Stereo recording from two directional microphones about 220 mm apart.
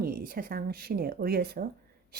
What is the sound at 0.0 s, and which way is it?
Speech, 40° right (ahead or behind).